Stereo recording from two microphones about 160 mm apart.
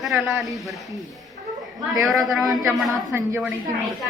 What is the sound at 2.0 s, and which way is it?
Speech, centre (ahead or behind).